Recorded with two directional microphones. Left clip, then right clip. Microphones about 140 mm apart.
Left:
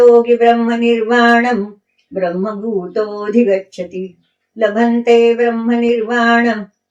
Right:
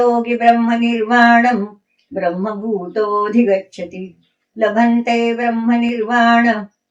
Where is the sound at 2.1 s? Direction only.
5° right (ahead or behind).